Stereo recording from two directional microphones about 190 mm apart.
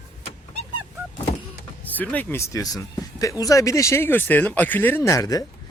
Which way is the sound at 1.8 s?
10° left (ahead or behind).